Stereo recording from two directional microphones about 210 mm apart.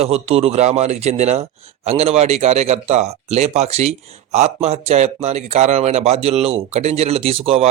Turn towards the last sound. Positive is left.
turn(degrees=-30)  # may be behind; listen again after turning